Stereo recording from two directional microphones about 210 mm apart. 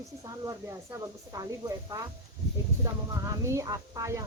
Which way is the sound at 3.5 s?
15° right (ahead or behind).